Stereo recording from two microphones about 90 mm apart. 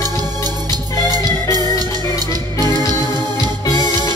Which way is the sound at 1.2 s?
40° left (ahead or behind).